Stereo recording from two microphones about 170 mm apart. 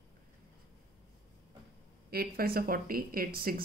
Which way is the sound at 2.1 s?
65° right (ahead or behind).